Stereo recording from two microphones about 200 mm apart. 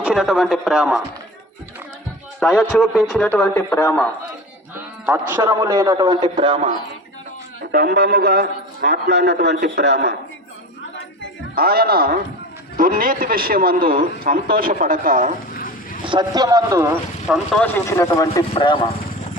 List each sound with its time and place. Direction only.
0.0 s a man's voice: centre (ahead or behind)
2.4 s a man's voice: 5° left (ahead or behind)
5.0 s speech: 5° right (ahead or behind)
5.4 s a man's voice: 15° right (ahead or behind)
7.7 s a man's voice: 50° right (ahead or behind)
11.5 s a man's voice: 50° right (ahead or behind)
15.5 s a sound: 45° left (ahead or behind)
16.0 s speech: 20° right (ahead or behind)
17.2 s speech: centre (ahead or behind); by 18.9 s 25° left (ahead or behind)